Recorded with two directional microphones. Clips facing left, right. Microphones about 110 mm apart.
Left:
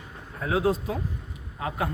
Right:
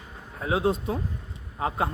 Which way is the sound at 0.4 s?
25° right (ahead or behind).